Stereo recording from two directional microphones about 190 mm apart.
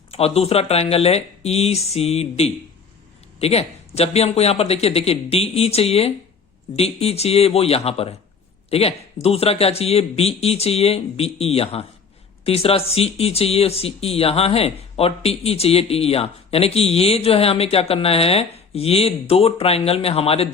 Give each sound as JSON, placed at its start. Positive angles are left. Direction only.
{"t": 0.1, "sound": "speech", "side_deg": 30}